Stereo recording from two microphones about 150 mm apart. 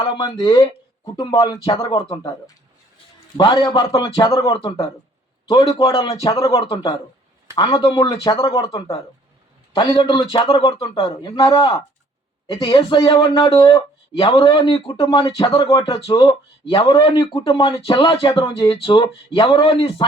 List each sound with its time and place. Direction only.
0.0 s speech: 30° left (ahead or behind)
3.3 s a man's voice: 30° left (ahead or behind)